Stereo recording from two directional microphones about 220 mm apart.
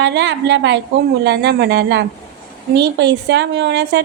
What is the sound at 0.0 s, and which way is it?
Speech, 55° right (ahead or behind).